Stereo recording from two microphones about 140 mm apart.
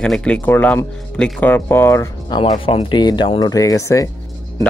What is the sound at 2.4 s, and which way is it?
Speech, 45° left (ahead or behind).